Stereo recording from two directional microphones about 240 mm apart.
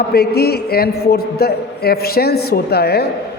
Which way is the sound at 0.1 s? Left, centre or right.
Left.